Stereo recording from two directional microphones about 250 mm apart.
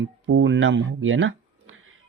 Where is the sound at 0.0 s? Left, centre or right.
Right.